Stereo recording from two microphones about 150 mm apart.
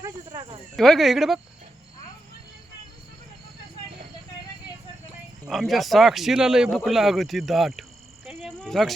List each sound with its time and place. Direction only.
0.0 s cricket: 25° right (ahead or behind)
0.8 s speech: centre (ahead or behind)
5.5 s speech: centre (ahead or behind)
8.4 s a sound: 5° left (ahead or behind)